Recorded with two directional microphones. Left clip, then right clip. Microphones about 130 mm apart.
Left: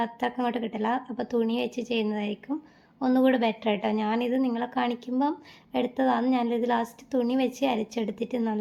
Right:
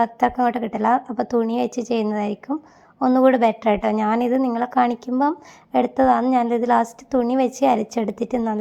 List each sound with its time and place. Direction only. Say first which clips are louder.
0.0 s a woman's voice: right 10 dB; 40° right (ahead or behind)